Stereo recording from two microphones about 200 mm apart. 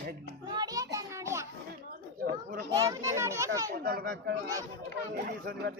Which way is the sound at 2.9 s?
15° right (ahead or behind).